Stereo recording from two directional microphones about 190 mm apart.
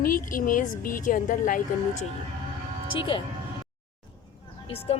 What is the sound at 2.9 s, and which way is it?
Speech, 25° left (ahead or behind).